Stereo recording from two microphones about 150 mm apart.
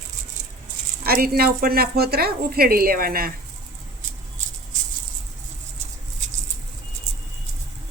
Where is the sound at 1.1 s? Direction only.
90° right.